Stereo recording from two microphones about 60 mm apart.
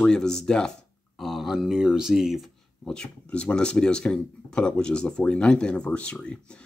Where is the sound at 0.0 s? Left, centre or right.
Centre.